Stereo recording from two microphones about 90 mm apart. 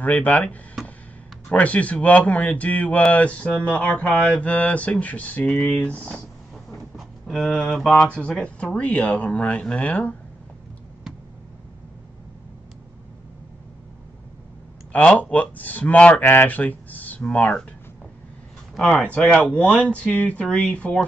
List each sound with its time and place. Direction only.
0.0 s speech: 15° left (ahead or behind)
0.8 s a sound: 5° right (ahead or behind)
1.5 s speech: 15° left (ahead or behind)
5.6 s speech: 5° left (ahead or behind)
5.9 s speech: 15° left (ahead or behind)
6.7 s a sound: centre (ahead or behind)
7.5 s speech: 5° left (ahead or behind)
14.9 s speech: 15° left (ahead or behind)
18.8 s speech: 5° left (ahead or behind)